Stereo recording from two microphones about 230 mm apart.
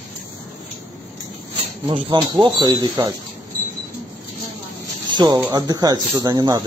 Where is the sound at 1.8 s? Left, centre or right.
Right.